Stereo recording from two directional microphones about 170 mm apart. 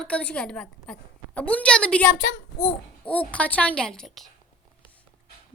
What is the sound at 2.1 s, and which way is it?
Speech, 90° left.